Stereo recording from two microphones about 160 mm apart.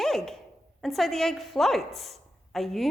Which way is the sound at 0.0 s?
Centre (ahead or behind).